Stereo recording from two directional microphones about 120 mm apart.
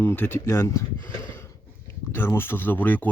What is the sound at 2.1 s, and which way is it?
Speech, 20° left (ahead or behind).